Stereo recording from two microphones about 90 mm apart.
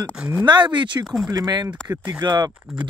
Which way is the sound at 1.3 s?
45° right (ahead or behind).